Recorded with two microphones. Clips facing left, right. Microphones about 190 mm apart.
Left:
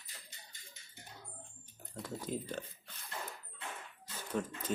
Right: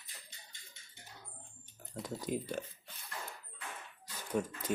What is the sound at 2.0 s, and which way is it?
Speech, 15° right (ahead or behind).